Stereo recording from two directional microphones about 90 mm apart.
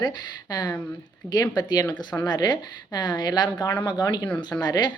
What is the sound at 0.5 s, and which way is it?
A woman's voice, 50° left (ahead or behind).